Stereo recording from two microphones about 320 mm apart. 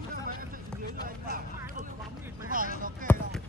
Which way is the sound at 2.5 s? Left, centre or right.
Right.